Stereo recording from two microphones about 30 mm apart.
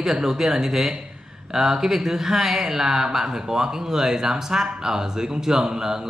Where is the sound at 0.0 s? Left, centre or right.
Centre.